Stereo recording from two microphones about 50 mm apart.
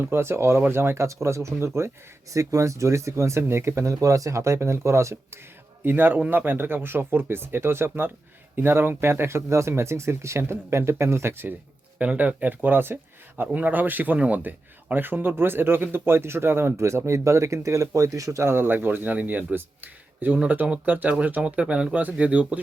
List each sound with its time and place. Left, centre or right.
0.1 s speech: right
2.3 s speech: right
5.8 s speech: right
11.9 s speech: right
16.7 s speech: right